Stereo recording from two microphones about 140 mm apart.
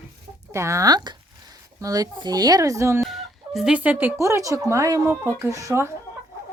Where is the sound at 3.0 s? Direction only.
Centre (ahead or behind).